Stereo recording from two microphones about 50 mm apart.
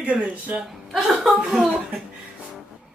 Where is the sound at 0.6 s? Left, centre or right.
Centre.